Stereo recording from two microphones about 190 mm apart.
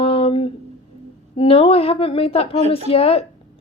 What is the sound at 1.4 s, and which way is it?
A woman's voice, 30° left (ahead or behind).